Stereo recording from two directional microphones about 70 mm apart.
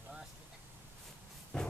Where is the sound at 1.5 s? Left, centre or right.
Centre.